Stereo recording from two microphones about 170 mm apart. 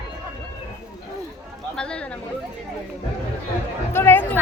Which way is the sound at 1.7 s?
5° left (ahead or behind).